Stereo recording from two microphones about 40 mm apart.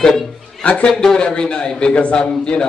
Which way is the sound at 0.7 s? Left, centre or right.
Left.